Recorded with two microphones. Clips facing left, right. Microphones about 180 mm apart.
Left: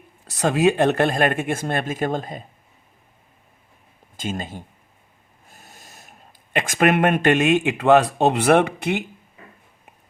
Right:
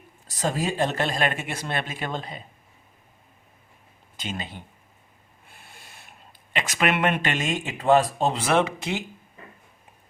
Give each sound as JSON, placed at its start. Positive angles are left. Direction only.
{"t": 0.3, "sound": "speech", "side_deg": 70}
{"t": 4.2, "sound": "speech", "side_deg": 45}